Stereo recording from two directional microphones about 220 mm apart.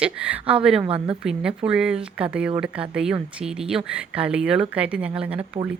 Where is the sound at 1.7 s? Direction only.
5° right (ahead or behind).